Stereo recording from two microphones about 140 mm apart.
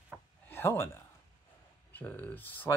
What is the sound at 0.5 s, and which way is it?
Speech, 15° left (ahead or behind).